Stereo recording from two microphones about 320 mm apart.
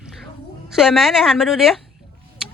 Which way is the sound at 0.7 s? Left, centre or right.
Centre.